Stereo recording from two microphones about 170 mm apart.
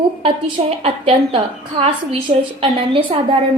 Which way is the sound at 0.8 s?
35° right (ahead or behind).